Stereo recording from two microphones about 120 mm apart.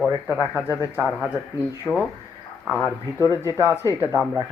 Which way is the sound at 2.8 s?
30° left (ahead or behind).